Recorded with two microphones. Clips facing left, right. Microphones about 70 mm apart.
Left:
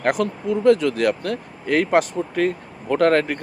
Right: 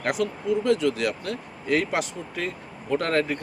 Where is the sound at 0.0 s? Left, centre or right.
Left.